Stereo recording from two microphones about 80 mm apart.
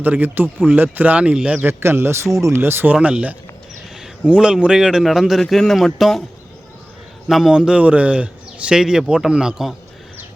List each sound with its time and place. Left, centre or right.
0.0 s a man's voice: right
1.6 s speech: right
2.9 s a man's voice: centre
7.3 s a man's voice: centre